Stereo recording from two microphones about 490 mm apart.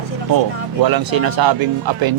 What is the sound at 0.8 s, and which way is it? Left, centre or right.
Speech, right.